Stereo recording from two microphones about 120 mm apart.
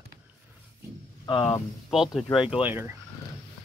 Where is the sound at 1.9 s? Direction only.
5° right (ahead or behind).